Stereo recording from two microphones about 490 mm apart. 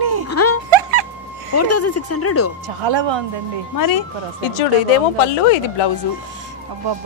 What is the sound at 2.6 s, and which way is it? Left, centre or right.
Speech, right.